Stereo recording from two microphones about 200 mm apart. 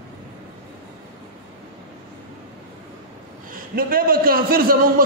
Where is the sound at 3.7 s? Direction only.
45° right (ahead or behind).